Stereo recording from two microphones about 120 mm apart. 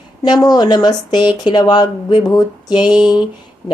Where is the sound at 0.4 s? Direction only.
35° left (ahead or behind).